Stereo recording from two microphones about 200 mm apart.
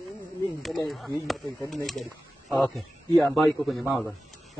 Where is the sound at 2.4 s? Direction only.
10° left (ahead or behind).